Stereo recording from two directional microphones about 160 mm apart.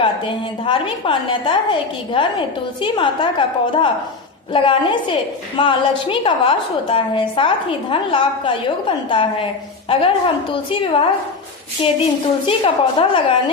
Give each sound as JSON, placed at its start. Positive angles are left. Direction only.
{"t": 0.0, "sound": "a woman's voice", "side_deg": 30}